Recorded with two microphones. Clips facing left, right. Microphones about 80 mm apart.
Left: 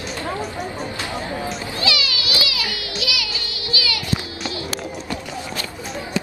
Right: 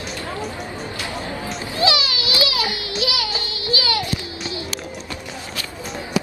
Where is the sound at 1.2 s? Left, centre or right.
Left.